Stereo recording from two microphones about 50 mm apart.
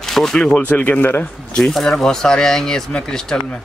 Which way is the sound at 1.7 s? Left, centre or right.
Centre.